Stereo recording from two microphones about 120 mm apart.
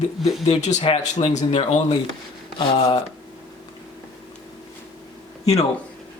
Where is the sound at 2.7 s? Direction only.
50° left (ahead or behind).